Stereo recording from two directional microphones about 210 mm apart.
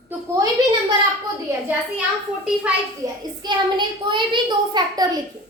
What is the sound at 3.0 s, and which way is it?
A woman's voice, 15° right (ahead or behind).